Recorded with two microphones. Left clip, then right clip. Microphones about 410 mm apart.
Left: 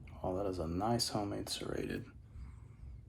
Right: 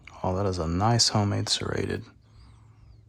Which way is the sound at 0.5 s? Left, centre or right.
Centre.